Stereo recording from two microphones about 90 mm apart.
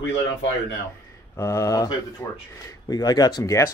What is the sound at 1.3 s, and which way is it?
Speech, 35° left (ahead or behind).